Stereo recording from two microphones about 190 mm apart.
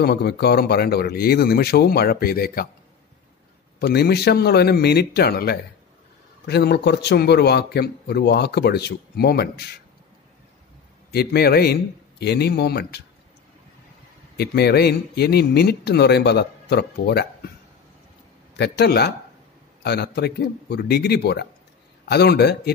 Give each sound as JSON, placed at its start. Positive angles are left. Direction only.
{"t": 0.0, "sound": "a man's voice", "side_deg": 55}
{"t": 3.8, "sound": "a man's voice", "side_deg": 55}
{"t": 11.1, "sound": "a man's voice", "side_deg": 55}
{"t": 14.3, "sound": "a man's voice", "side_deg": 60}
{"t": 18.6, "sound": "a man's voice", "side_deg": 60}